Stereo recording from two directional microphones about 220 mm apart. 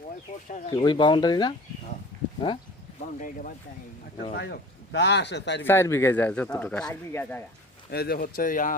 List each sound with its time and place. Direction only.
0.7 s speech: 20° left (ahead or behind)
3.2 s speech: 40° left (ahead or behind)
4.4 s speech: 50° left (ahead or behind)
5.6 s speech: 10° left (ahead or behind)
7.9 s speech: 45° left (ahead or behind)